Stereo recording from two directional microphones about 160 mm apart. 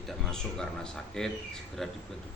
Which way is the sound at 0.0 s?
Centre (ahead or behind).